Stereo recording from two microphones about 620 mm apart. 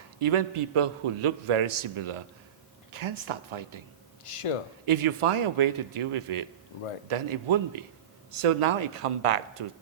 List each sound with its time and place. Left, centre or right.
0.2 s a man's voice: right
4.2 s speech: left
4.9 s a man's voice: right